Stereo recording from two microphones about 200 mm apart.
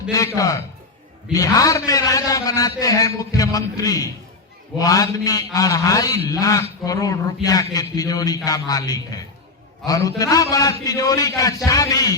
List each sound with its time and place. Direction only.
0.3 s a man's voice: 15° left (ahead or behind)